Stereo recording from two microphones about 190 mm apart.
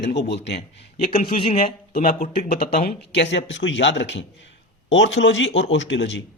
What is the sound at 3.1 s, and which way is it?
A man's voice, 65° left (ahead or behind).